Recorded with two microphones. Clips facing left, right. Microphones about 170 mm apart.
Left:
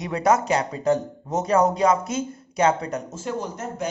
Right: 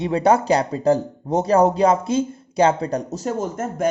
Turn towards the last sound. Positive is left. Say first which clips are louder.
# right 7 dB
turn(degrees=-50)  # may be behind; listen again after turning